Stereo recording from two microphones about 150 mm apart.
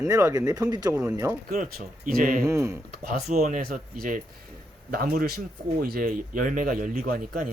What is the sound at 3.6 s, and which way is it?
Speech, 65° right (ahead or behind).